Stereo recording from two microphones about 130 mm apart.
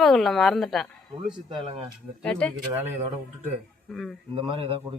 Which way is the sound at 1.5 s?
35° right (ahead or behind).